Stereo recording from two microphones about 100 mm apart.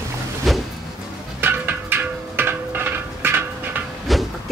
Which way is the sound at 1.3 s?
20° right (ahead or behind).